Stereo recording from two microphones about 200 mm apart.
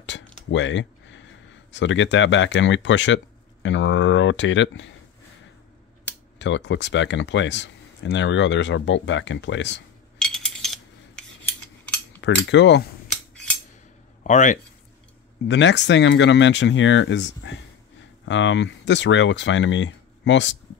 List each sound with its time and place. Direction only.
0.5 s speech: 65° left (ahead or behind)
6.3 s speech: 65° left (ahead or behind)
10.1 s a sound: 5° left (ahead or behind)
12.2 s speech: 65° left (ahead or behind)
14.2 s speech: 40° left (ahead or behind)
15.4 s speech: 60° left (ahead or behind)